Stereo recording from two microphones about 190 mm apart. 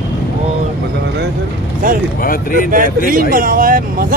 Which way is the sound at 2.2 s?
50° left (ahead or behind).